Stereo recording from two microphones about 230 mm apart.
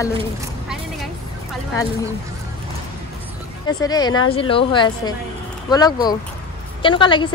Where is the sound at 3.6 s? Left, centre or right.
Centre.